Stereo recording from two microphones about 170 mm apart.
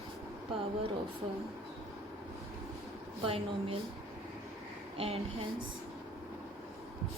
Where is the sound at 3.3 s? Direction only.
35° right (ahead or behind).